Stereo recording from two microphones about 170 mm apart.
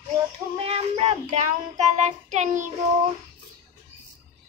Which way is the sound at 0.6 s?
35° right (ahead or behind).